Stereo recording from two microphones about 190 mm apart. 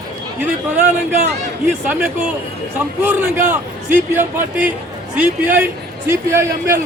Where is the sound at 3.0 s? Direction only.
10° right (ahead or behind).